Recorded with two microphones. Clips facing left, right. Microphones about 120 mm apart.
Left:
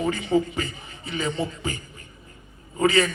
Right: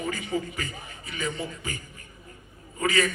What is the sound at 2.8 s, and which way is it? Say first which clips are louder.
Speech: left 5 dB; 30° left (ahead or behind).